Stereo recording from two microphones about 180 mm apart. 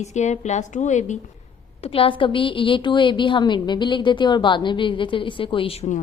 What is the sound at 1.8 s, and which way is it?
A woman's voice, 30° left (ahead or behind).